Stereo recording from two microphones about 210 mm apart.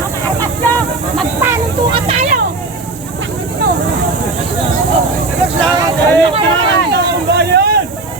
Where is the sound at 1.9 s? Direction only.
30° right (ahead or behind).